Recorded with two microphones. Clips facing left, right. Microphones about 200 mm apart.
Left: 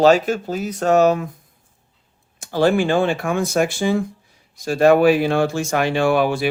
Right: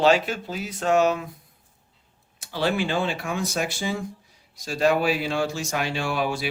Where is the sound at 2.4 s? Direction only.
45° left (ahead or behind).